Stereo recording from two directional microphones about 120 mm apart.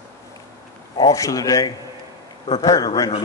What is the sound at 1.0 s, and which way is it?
Speech, 30° left (ahead or behind).